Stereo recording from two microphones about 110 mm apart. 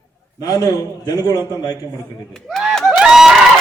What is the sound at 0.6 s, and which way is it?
Speech, 35° left (ahead or behind).